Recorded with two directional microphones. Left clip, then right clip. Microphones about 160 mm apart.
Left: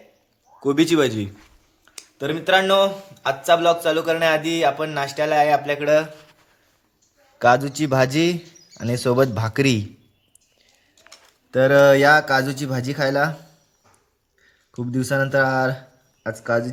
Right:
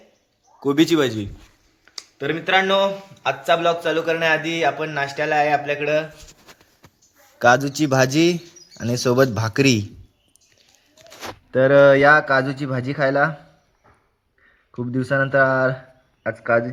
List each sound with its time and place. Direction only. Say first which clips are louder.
0.6 s speech: even; 5° right (ahead or behind)
2.1 s speech: left 1 dB; 20° left (ahead or behind)
7.3 s speech: right 1 dB; centre (ahead or behind)
11.5 s speech: right 1 dB; 5° left (ahead or behind)
14.8 s speech: right 1 dB; 5° left (ahead or behind)